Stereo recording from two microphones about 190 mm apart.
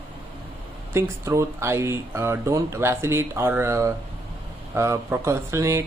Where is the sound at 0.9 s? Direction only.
15° right (ahead or behind).